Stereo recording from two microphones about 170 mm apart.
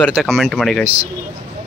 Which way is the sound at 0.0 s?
Centre (ahead or behind).